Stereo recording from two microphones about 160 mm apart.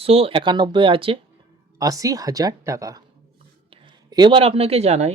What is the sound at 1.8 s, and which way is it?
Speech, 20° right (ahead or behind).